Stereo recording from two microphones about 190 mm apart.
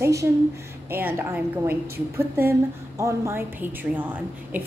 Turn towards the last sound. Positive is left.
turn(degrees=-10)  # may be behind; listen again after turning